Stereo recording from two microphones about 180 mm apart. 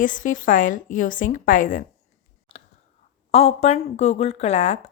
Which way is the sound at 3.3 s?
35° left (ahead or behind).